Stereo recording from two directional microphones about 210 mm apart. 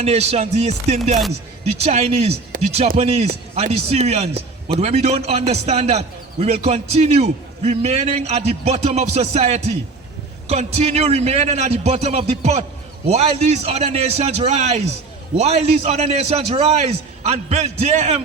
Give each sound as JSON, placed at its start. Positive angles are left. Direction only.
{"t": 0.0, "sound": "a man's voice", "side_deg": -30}